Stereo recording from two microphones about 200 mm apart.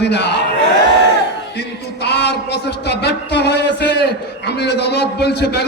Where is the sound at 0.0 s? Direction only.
55° left (ahead or behind).